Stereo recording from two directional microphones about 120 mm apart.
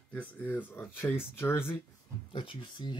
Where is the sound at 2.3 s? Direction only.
45° left (ahead or behind).